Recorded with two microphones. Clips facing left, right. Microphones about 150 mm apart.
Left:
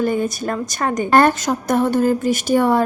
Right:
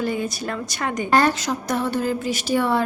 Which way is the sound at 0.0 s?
50° left (ahead or behind).